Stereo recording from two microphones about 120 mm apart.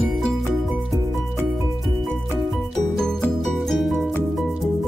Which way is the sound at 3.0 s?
5° left (ahead or behind).